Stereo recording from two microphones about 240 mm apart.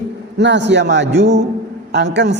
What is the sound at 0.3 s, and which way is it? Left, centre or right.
A man's voice, right.